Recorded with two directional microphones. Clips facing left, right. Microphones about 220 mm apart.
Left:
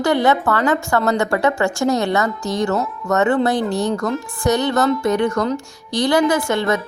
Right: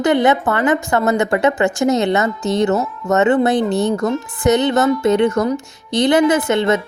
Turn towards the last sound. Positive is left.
turn(degrees=-20)  # may be behind; listen again after turning